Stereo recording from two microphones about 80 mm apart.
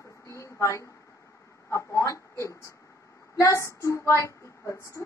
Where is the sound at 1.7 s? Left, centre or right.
Left.